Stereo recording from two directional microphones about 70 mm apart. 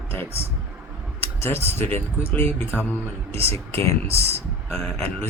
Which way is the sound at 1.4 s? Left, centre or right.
Left.